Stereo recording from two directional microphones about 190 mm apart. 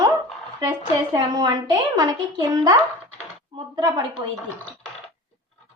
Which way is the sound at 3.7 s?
20° right (ahead or behind).